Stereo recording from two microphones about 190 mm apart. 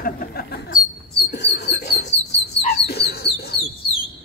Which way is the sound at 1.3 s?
60° left (ahead or behind).